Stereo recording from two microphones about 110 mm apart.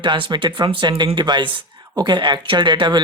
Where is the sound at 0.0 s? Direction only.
45° right (ahead or behind).